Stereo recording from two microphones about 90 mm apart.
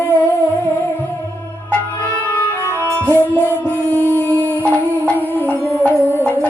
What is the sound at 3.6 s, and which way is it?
Music, 20° left (ahead or behind).